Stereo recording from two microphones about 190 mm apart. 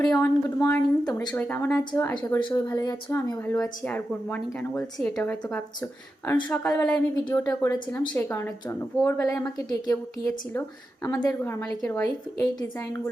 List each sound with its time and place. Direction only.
0.1 s a woman's voice: 15° left (ahead or behind)
1.4 s a woman's voice: 10° left (ahead or behind)
2.1 s a woman's voice: 25° left (ahead or behind)